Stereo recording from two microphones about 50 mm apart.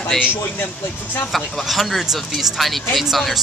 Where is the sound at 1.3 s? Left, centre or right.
Centre.